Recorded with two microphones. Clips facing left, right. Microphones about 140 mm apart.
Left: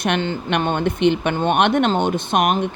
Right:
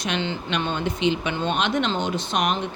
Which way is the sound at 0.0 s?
55° left (ahead or behind).